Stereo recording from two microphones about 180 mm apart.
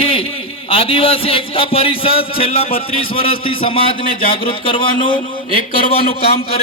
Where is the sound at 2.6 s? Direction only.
55° left (ahead or behind).